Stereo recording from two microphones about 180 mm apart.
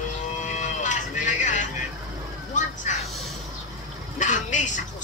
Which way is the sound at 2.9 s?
40° left (ahead or behind).